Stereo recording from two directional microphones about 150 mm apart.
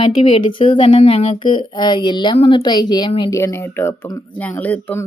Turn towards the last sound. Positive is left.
turn(degrees=10)  # may be behind; listen again after turning